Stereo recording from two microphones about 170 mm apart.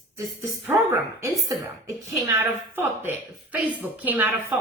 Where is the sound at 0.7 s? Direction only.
15° right (ahead or behind).